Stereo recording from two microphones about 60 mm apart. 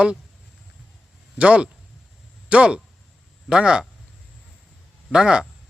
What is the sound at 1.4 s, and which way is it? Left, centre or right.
Speech, centre.